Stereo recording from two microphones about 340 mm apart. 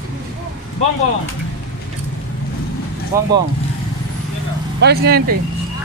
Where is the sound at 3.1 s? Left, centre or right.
Centre.